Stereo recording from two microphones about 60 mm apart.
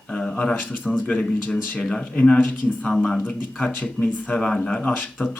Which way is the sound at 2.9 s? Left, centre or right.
Centre.